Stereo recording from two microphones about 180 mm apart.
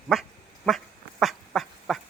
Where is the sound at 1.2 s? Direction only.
Centre (ahead or behind).